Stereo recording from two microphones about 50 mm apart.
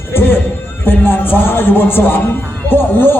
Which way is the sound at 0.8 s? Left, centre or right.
Left.